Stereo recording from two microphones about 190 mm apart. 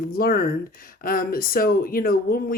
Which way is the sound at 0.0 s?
50° left (ahead or behind).